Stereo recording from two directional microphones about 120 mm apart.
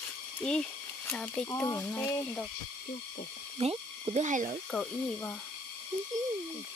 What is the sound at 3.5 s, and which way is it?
Speech, 55° right (ahead or behind).